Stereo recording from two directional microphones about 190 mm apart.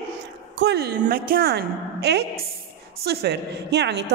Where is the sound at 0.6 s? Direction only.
60° right (ahead or behind).